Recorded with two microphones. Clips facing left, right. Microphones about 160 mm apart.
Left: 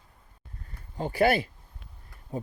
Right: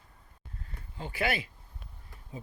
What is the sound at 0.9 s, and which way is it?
Speech, 45° left (ahead or behind).